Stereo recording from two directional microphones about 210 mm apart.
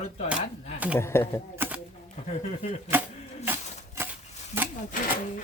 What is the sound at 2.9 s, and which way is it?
Speech, 10° right (ahead or behind).